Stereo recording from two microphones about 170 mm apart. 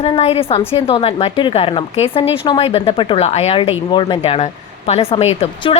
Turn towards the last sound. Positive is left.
turn(degrees=35)  # may be behind; listen again after turning